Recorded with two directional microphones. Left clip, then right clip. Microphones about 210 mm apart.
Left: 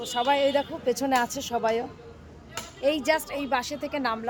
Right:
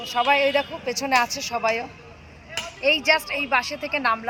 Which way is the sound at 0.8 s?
30° left (ahead or behind).